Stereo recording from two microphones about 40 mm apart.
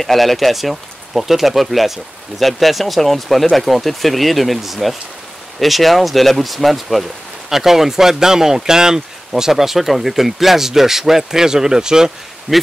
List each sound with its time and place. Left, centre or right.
0.0 s speech: centre
12.5 s speech: right